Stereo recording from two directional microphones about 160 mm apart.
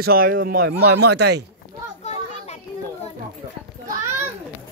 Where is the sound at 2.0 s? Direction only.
45° left (ahead or behind).